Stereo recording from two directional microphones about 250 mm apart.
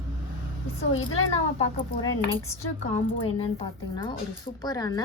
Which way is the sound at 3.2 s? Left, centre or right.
Left.